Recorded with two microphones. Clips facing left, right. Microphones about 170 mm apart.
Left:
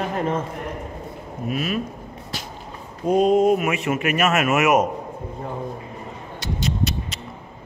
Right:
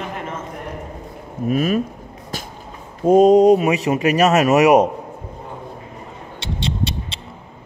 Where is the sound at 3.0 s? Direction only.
45° right (ahead or behind).